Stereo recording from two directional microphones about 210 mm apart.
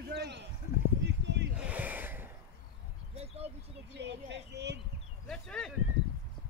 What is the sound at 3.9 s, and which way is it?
Speech, 55° right (ahead or behind).